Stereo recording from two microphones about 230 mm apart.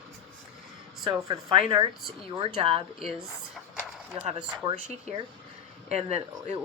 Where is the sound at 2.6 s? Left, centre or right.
Right.